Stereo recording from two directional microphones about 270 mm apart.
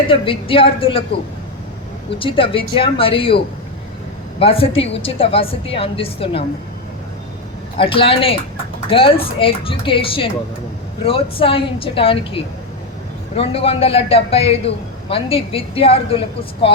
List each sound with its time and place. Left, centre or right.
0.1 s a woman's voice: centre
2.1 s a woman's voice: centre
7.8 s a woman's voice: centre